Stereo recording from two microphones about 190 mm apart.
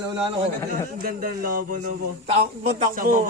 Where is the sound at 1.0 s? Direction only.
50° right (ahead or behind).